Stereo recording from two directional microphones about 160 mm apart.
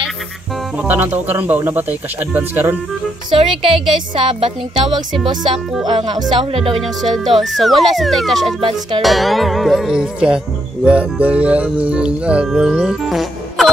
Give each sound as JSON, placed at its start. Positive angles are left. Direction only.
{"t": 0.7, "sound": "speech", "side_deg": -10}
{"t": 3.3, "sound": "speech", "side_deg": -35}
{"t": 6.8, "sound": "speech", "side_deg": 0}
{"t": 8.5, "sound": "speech", "side_deg": -35}
{"t": 9.0, "sound": "speech", "side_deg": 0}